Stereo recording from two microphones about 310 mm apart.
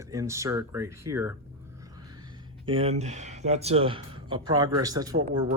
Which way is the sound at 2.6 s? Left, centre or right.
Centre.